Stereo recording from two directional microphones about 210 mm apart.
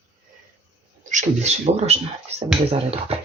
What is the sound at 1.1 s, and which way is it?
Speech, 35° right (ahead or behind).